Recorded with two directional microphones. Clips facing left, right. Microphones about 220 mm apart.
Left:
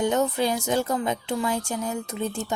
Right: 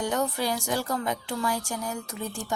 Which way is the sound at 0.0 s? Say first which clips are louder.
Left 5 dB; 20° left (ahead or behind).